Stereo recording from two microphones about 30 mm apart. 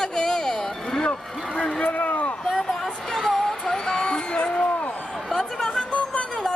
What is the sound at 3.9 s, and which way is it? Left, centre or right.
Music, left.